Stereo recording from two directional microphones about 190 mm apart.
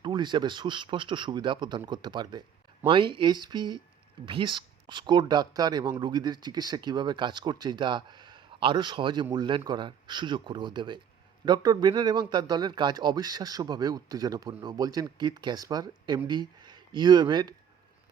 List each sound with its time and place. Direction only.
0.0 s a man's voice: 25° right (ahead or behind)